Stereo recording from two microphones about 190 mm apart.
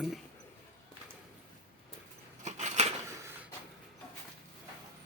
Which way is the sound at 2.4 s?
40° right (ahead or behind).